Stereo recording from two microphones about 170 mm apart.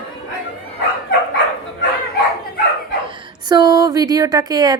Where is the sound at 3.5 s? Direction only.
25° right (ahead or behind).